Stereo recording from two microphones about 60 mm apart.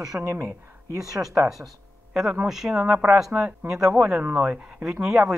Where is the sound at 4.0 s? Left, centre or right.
Right.